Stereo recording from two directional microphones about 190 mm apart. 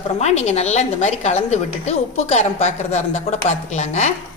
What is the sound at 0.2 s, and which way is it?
A woman's voice, 35° left (ahead or behind).